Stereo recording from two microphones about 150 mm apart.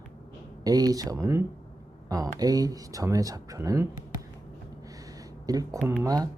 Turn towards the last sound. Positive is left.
turn(degrees=-25)  # may be behind; listen again after turning